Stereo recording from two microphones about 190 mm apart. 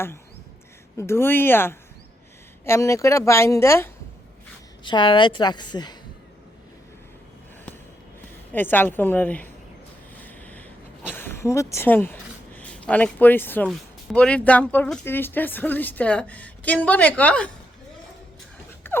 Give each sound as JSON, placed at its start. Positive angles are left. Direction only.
{"t": 0.9, "sound": "speech", "side_deg": 15}
{"t": 4.8, "sound": "a woman's voice", "side_deg": 25}
{"t": 8.5, "sound": "speech", "side_deg": 10}
{"t": 10.2, "sound": "a sound", "side_deg": 10}
{"t": 11.1, "sound": "speech", "side_deg": 10}
{"t": 18.8, "sound": "a sound", "side_deg": 10}